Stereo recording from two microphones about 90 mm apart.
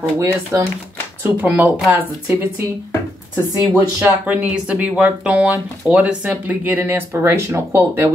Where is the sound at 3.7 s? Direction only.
35° right (ahead or behind).